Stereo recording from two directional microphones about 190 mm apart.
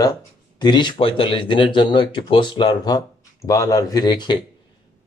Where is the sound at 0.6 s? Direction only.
25° left (ahead or behind).